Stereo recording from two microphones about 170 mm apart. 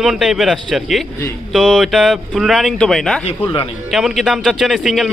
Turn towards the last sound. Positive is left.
turn(degrees=0)  # may be behind; listen again after turning